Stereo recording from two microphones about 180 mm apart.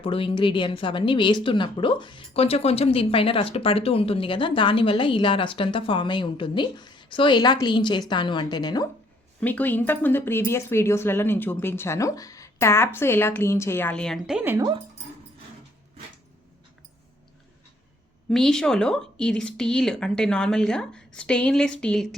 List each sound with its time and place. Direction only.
0.0 s speech: 30° left (ahead or behind)
9.4 s speech: 10° left (ahead or behind); by 14.6 s 10° right (ahead or behind)
18.3 s a woman's voice: 5° left (ahead or behind)